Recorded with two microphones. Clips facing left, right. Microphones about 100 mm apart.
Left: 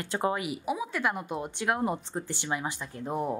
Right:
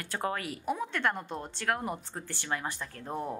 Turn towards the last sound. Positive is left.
turn(degrees=15)  # may be behind; listen again after turning